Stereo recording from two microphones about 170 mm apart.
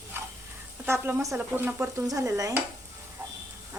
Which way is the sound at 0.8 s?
15° right (ahead or behind).